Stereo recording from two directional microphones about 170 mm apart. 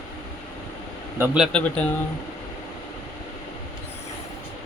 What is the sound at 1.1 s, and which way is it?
Speech, 10° right (ahead or behind).